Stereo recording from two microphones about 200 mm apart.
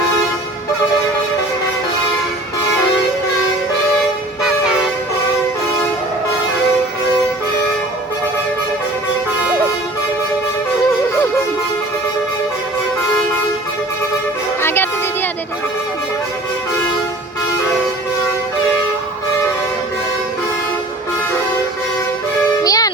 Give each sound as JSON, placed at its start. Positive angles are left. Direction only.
{"t": 14.6, "sound": "music", "side_deg": 10}
{"t": 22.6, "sound": "music", "side_deg": 20}